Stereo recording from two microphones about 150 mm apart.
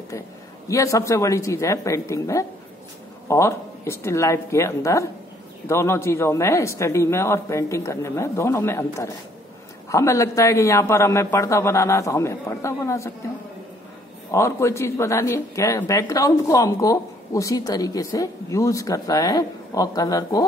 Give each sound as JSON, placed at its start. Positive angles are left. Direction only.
{"t": 0.7, "sound": "speech", "side_deg": 20}
{"t": 14.3, "sound": "speech", "side_deg": 20}